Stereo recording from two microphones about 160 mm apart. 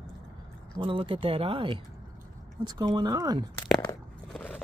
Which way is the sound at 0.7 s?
35° right (ahead or behind).